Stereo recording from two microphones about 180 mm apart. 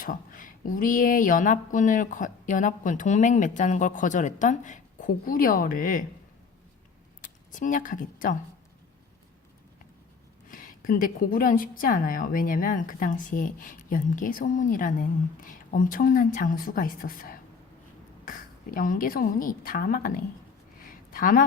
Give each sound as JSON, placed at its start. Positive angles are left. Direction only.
{"t": 0.0, "sound": "a woman's voice", "side_deg": 50}
{"t": 7.2, "sound": "speech", "side_deg": 45}
{"t": 10.5, "sound": "a woman's voice", "side_deg": 50}
{"t": 20.8, "sound": "a sound", "side_deg": 50}